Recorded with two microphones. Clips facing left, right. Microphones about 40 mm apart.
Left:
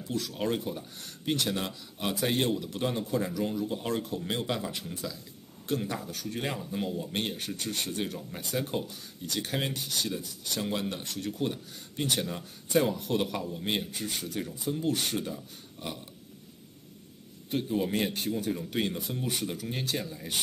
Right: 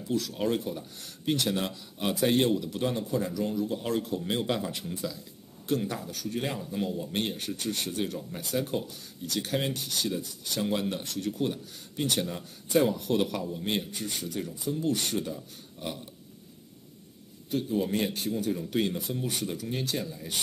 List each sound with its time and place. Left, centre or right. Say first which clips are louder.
0.4 s speech: right 2 dB; centre
17.5 s a man's voice: right 1 dB; left
17.7 s speech: even; centre